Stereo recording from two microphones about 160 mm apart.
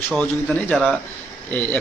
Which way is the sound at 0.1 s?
5° left (ahead or behind).